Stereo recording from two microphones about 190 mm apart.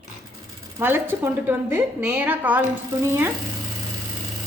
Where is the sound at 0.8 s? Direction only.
10° right (ahead or behind).